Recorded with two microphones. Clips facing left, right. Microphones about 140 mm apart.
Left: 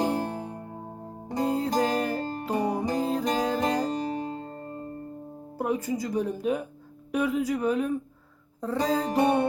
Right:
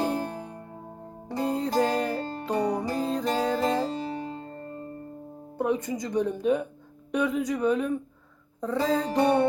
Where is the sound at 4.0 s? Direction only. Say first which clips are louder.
Left 2 dB; 45° left (ahead or behind).